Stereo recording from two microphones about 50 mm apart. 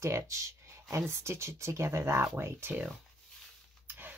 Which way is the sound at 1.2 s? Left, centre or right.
Right.